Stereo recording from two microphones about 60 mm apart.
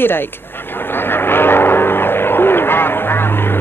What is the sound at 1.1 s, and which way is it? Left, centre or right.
Vehicle, left.